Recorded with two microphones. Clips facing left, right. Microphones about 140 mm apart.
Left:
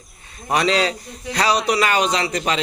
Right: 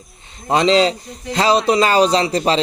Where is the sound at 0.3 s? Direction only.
25° right (ahead or behind).